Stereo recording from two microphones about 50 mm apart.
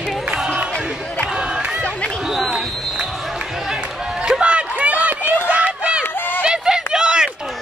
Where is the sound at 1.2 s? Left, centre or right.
Centre.